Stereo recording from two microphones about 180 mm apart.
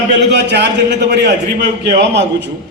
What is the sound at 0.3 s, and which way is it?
A man's voice, 70° right (ahead or behind).